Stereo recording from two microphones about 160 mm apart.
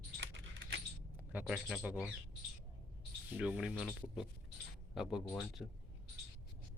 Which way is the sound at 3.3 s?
5° right (ahead or behind).